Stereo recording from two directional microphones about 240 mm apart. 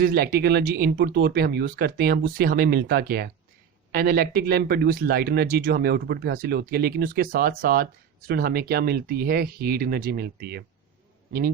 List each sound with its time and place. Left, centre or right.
0.0 s a man's voice: right